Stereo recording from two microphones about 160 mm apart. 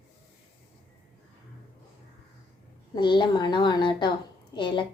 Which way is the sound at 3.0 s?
30° left (ahead or behind).